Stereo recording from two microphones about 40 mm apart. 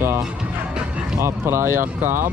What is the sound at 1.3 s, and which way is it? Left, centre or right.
Speech, right.